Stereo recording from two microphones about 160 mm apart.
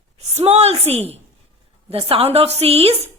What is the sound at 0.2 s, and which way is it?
A woman's voice, 45° right (ahead or behind).